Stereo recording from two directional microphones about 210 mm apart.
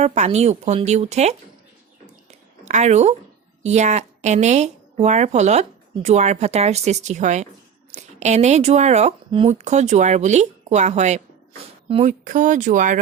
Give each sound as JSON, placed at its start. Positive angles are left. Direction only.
{"t": 0.0, "sound": "speech", "side_deg": -30}
{"t": 2.6, "sound": "speech", "side_deg": -35}